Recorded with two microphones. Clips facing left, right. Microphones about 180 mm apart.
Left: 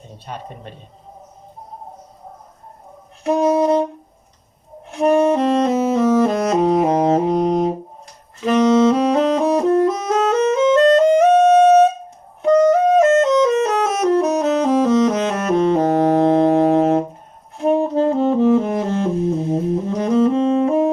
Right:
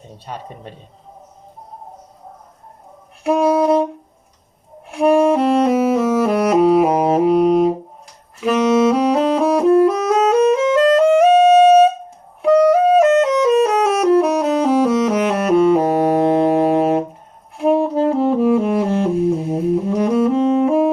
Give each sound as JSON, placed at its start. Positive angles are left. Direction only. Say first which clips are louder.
{"t": 3.2, "sound": "saxophone", "louder": "right 1 dB", "side_deg": -10}
{"t": 4.9, "sound": "saxophone", "louder": "right 1 dB", "side_deg": -10}
{"t": 10.9, "sound": "music", "louder": "right 1 dB", "side_deg": -5}
{"t": 17.6, "sound": "saxophone", "louder": "right 1 dB", "side_deg": -10}